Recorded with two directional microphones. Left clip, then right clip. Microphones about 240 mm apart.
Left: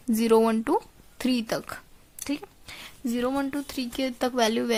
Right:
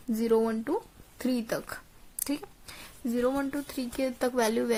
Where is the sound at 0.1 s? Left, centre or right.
Left.